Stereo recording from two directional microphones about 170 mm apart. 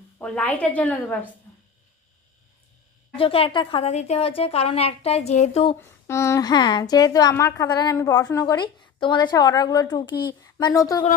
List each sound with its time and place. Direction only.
0.2 s a woman's voice: 10° left (ahead or behind)
3.2 s a woman's voice: 35° left (ahead or behind)
5.8 s a woman's voice: 15° left (ahead or behind)